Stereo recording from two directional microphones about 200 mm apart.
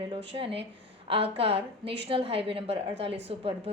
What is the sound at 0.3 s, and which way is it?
A woman's voice, 30° right (ahead or behind).